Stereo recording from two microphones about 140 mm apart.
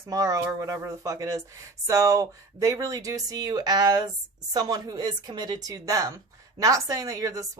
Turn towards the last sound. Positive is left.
turn(degrees=-25)  # may be behind; listen again after turning